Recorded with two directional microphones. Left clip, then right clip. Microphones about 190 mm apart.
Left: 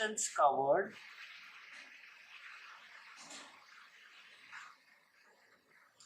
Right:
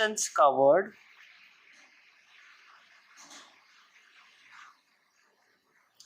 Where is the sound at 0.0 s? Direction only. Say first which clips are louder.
Right 8 dB; 35° right (ahead or behind).